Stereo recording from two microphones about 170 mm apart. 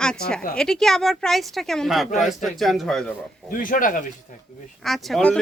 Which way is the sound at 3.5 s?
55° left (ahead or behind).